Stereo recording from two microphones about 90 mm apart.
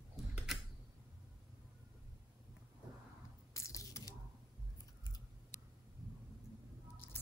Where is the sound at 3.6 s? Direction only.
35° left (ahead or behind).